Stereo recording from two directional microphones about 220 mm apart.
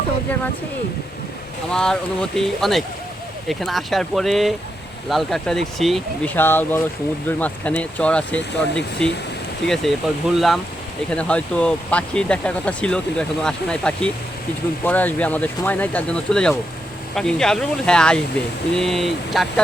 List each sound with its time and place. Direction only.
1.7 s speech: 5° left (ahead or behind)